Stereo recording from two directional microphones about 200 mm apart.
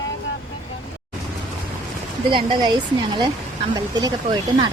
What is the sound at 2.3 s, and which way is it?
Speech, 25° right (ahead or behind).